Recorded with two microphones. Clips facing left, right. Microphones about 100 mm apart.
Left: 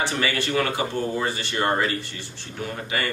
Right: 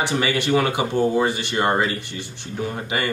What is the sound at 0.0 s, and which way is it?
Speech, 15° right (ahead or behind).